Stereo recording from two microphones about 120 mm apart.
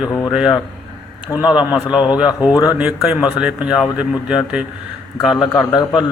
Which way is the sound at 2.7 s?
10° right (ahead or behind).